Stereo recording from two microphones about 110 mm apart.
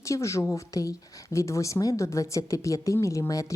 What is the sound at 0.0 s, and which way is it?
A woman's voice, 25° left (ahead or behind).